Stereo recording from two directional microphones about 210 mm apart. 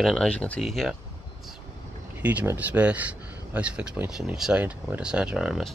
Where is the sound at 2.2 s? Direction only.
10° right (ahead or behind).